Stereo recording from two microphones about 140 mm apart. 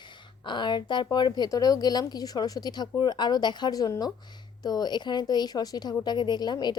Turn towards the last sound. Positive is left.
turn(degrees=30)  # may be behind; listen again after turning